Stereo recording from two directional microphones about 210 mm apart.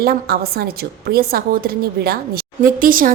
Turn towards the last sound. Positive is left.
turn(degrees=-40)  # may be behind; listen again after turning